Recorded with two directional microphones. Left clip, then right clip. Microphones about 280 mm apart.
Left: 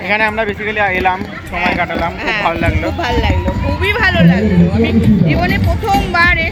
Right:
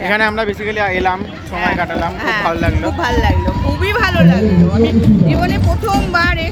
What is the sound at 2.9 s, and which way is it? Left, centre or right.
Speech, centre.